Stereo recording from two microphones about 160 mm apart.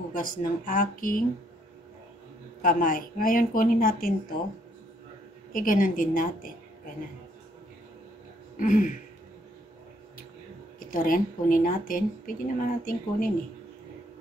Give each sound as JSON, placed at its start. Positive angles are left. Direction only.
{"t": 0.1, "sound": "speech", "side_deg": 60}
{"t": 2.6, "sound": "speech", "side_deg": 60}
{"t": 5.5, "sound": "speech", "side_deg": 60}
{"t": 8.5, "sound": "speech", "side_deg": 55}
{"t": 10.8, "sound": "speech", "side_deg": 60}